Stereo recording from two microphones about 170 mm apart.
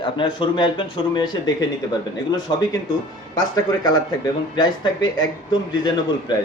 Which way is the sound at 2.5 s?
25° left (ahead or behind).